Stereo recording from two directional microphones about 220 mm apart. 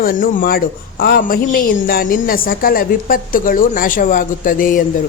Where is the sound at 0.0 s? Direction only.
40° left (ahead or behind).